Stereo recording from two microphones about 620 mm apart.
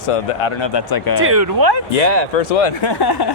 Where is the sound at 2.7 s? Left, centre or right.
Left.